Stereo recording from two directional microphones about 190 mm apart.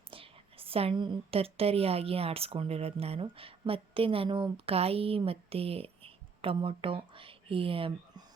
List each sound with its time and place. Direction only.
0.1 s a woman's voice: 30° right (ahead or behind)